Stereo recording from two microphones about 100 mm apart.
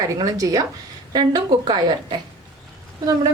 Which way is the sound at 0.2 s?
35° right (ahead or behind).